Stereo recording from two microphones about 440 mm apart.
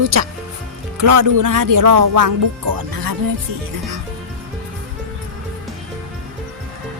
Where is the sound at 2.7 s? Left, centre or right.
Right.